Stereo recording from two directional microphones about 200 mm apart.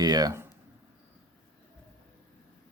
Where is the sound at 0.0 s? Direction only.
20° right (ahead or behind).